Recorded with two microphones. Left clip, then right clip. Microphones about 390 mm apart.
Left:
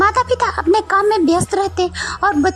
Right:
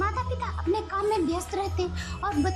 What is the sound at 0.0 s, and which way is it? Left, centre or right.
Speech, centre.